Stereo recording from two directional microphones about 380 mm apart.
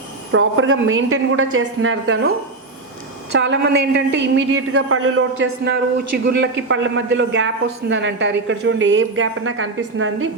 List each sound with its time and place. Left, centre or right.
0.3 s a woman's voice: right
3.3 s a man's voice: right